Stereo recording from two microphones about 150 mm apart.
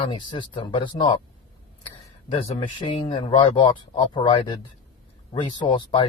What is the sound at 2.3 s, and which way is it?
Speech, 30° left (ahead or behind).